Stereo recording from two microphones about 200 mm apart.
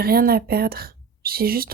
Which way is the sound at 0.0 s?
50° right (ahead or behind).